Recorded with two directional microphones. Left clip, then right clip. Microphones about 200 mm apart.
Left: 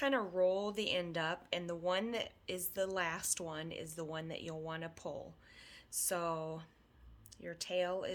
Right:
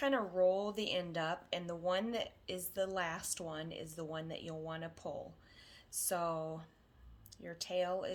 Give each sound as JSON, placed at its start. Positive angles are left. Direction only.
{"t": 0.0, "sound": "speech", "side_deg": 30}